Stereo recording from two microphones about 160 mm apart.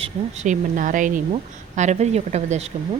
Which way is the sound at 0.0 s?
45° right (ahead or behind).